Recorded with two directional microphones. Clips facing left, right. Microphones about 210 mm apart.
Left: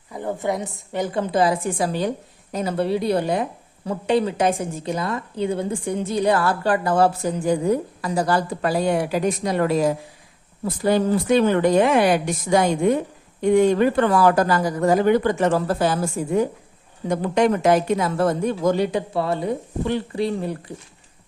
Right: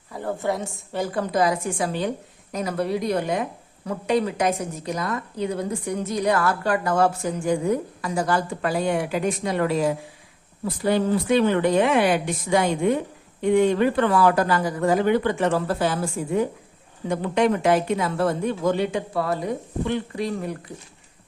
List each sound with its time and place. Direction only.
0.1 s a woman's voice: 15° left (ahead or behind)